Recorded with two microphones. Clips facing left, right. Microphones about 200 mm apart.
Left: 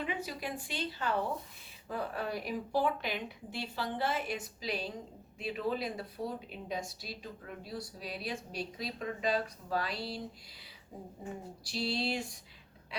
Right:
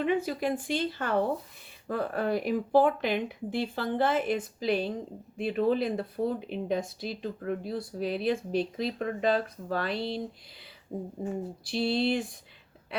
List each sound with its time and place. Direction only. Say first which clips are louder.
0.0 s speech: right 10 dB; 50° right (ahead or behind)
11.6 s speech: right 7 dB; 55° right (ahead or behind)